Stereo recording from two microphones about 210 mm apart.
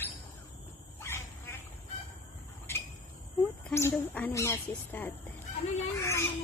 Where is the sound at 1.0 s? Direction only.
10° left (ahead or behind).